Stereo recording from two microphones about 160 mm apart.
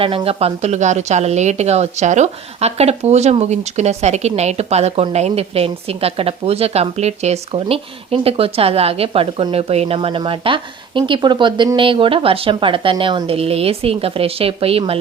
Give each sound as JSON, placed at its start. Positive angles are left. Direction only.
{"t": 0.0, "sound": "speech", "side_deg": -35}